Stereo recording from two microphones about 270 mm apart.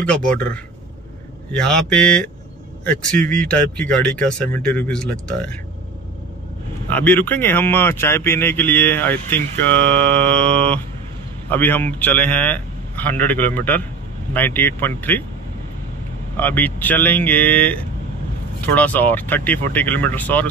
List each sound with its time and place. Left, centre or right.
0.0 s speech: centre
6.9 s a man's voice: centre
16.3 s a man's voice: centre